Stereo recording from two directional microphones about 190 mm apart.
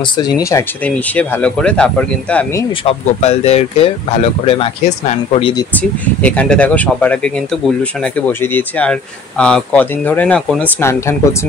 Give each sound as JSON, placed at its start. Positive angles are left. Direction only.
{"t": 0.2, "sound": "speech", "side_deg": 20}
{"t": 2.8, "sound": "speech", "side_deg": 35}
{"t": 5.8, "sound": "speech", "side_deg": 5}
{"t": 8.3, "sound": "speech", "side_deg": 10}